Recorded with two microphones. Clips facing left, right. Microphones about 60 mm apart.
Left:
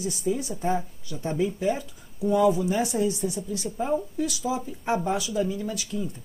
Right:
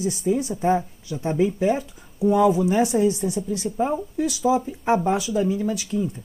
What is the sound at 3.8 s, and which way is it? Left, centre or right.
Speech, centre.